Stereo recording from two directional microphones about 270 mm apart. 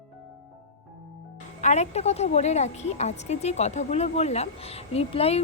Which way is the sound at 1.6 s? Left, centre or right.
Left.